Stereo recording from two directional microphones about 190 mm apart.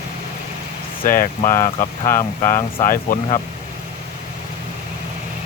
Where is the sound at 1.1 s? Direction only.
15° left (ahead or behind).